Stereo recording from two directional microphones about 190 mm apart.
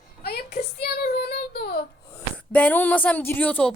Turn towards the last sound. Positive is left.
turn(degrees=10)  # may be behind; listen again after turning